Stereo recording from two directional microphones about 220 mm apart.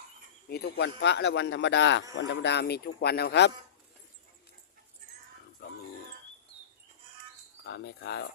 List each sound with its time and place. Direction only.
0.4 s speech: 50° left (ahead or behind)
7.6 s speech: 50° left (ahead or behind)